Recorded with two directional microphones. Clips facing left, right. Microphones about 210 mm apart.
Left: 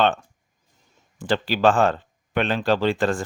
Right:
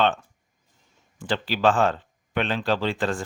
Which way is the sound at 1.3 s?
45° left (ahead or behind).